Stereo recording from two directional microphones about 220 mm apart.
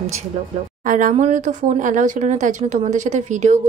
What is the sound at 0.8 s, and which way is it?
Speech, 35° right (ahead or behind).